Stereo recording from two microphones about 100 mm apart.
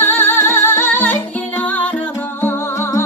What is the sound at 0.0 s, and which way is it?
Music, 20° left (ahead or behind).